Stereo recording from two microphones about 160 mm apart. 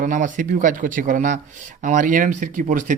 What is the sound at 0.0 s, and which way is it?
A man's voice, 55° right (ahead or behind).